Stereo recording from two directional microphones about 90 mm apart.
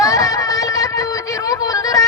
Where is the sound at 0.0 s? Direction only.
40° left (ahead or behind).